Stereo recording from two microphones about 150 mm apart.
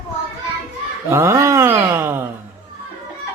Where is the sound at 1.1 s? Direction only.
20° right (ahead or behind).